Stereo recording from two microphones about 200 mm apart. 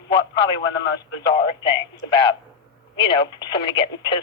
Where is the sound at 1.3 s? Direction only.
20° left (ahead or behind).